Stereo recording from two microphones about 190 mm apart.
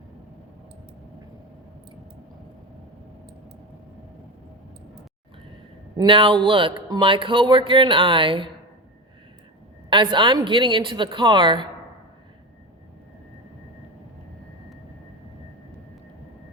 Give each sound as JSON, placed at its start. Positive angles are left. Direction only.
{"t": 6.0, "sound": "speech", "side_deg": -25}
{"t": 9.9, "sound": "speech", "side_deg": -25}